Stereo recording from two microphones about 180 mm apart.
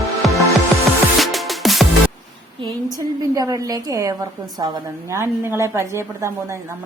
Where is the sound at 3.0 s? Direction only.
20° right (ahead or behind).